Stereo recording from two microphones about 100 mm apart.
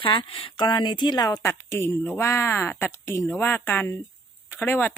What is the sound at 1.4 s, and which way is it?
Speech, 25° left (ahead or behind).